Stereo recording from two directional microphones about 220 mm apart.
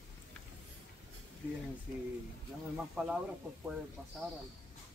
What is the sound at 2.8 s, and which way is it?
Speech, 5° right (ahead or behind).